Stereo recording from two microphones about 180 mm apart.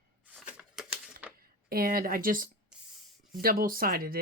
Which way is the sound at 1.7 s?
55° right (ahead or behind).